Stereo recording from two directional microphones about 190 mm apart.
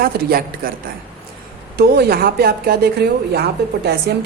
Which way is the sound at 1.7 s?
55° right (ahead or behind).